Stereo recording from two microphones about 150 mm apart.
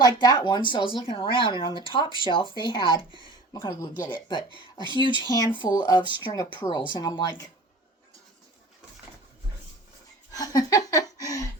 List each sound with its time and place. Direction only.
0.0 s speech: 25° left (ahead or behind)
10.3 s speech: 25° left (ahead or behind)